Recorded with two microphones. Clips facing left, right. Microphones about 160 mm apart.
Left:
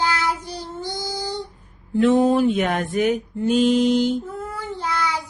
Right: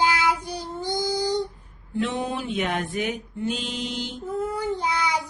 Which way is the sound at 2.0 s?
45° left (ahead or behind).